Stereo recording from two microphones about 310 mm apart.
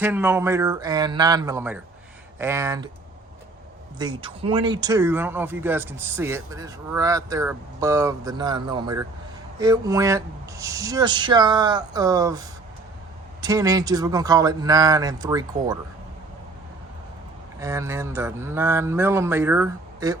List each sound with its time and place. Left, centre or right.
0.0 s a man's voice: centre
3.9 s a man's voice: centre
17.6 s a man's voice: centre